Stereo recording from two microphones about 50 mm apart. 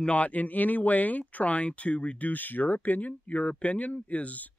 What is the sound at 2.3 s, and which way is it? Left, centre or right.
Speech, left.